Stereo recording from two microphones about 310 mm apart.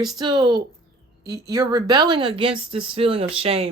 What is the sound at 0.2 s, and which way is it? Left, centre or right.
Speech, centre.